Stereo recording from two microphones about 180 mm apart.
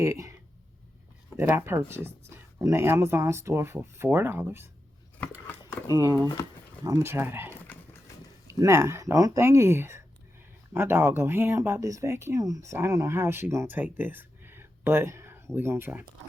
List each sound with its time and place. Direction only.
0.0 s speech: 15° right (ahead or behind)
1.4 s speech: 15° right (ahead or behind)
5.2 s scissors: 10° left (ahead or behind)
5.9 s speech: 15° right (ahead or behind)
7.5 s horse: 10° left (ahead or behind)
8.6 s speech: 15° right (ahead or behind)